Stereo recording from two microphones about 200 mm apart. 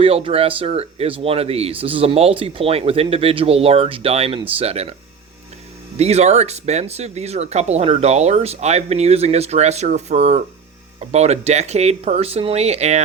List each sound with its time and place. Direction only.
0.0 s speech: 30° right (ahead or behind)
6.0 s speech: 35° right (ahead or behind)